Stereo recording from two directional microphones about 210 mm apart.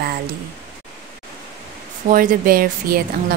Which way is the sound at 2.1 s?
40° right (ahead or behind).